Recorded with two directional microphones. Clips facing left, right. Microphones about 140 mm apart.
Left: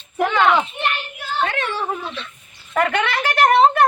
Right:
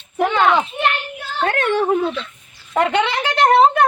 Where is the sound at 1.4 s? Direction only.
50° right (ahead or behind).